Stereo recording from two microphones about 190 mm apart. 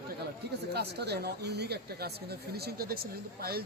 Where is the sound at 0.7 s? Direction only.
60° right (ahead or behind).